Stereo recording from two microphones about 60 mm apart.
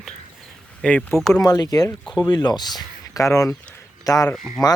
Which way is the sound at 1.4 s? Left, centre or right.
Left.